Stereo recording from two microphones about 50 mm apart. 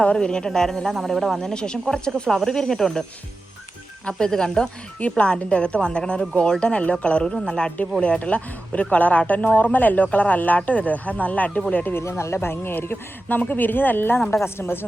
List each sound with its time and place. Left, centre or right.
0.0 s speech: centre
4.0 s speech: centre
4.9 s speech: left
9.7 s speech: left
11.9 s speech: left